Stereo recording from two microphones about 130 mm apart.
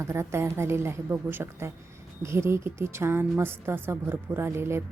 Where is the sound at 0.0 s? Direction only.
20° right (ahead or behind).